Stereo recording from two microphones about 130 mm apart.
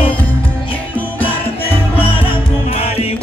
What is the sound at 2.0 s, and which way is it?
Music, 45° left (ahead or behind).